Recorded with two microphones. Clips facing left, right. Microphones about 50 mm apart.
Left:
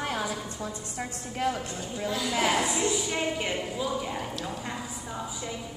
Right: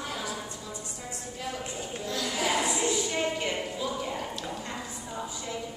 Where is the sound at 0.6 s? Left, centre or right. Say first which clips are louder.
Left 5 dB; left.